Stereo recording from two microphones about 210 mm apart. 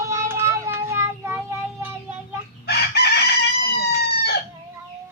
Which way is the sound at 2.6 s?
50° left (ahead or behind).